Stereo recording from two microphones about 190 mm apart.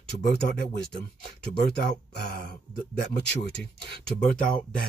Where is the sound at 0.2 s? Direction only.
60° left (ahead or behind).